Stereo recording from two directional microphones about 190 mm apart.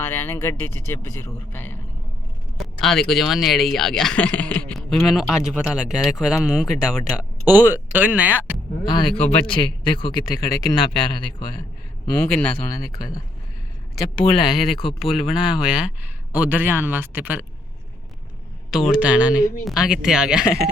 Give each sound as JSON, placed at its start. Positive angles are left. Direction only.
{"t": 0.0, "sound": "speech", "side_deg": 10}
{"t": 8.8, "sound": "a man's voice", "side_deg": 20}
{"t": 12.0, "sound": "a man's voice", "side_deg": 15}
{"t": 14.4, "sound": "speech", "side_deg": 0}
{"t": 18.7, "sound": "speech", "side_deg": -5}